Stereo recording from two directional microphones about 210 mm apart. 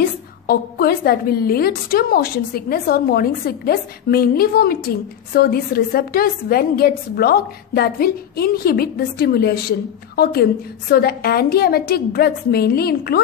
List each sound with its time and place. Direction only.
0.0 s a woman's voice: 45° left (ahead or behind)